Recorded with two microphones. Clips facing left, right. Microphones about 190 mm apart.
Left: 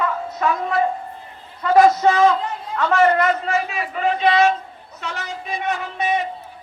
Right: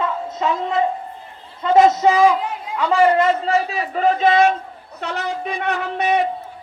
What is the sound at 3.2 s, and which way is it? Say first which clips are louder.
A man's voice: right 3 dB; 30° right (ahead or behind).